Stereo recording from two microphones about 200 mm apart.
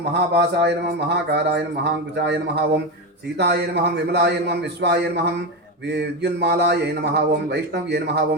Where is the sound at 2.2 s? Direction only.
60° right (ahead or behind).